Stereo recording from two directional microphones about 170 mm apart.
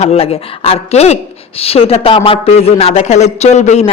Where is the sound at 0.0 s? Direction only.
35° left (ahead or behind).